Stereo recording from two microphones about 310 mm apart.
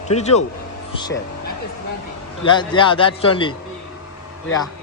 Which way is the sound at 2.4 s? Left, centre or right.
Centre.